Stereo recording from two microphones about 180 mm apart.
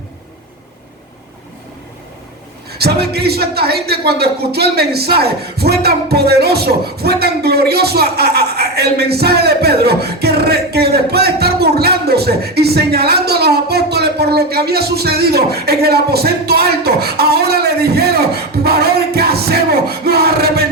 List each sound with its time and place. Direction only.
2.6 s a man's voice: 60° right (ahead or behind)